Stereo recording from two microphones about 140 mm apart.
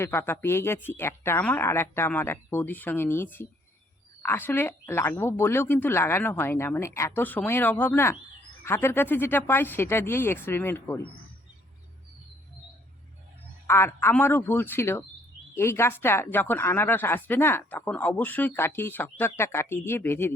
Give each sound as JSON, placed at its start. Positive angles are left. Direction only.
{"t": 0.0, "sound": "a woman's voice", "side_deg": 15}
{"t": 13.7, "sound": "a woman's voice", "side_deg": 20}